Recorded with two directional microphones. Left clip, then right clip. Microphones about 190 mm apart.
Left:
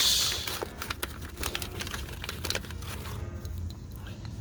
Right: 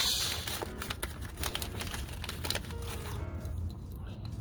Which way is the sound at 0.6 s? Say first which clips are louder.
Left 3 dB; 25° left (ahead or behind).